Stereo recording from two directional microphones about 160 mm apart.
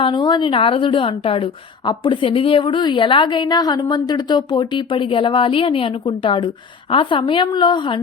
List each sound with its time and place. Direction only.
0.0 s a woman's voice: 30° left (ahead or behind)